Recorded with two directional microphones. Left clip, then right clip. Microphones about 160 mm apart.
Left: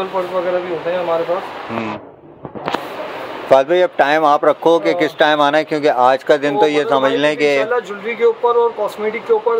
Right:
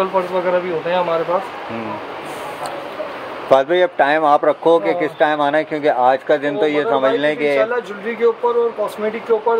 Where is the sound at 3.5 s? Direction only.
5° left (ahead or behind).